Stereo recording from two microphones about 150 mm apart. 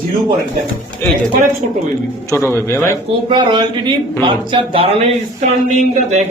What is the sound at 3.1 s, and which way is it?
Speech, 35° right (ahead or behind).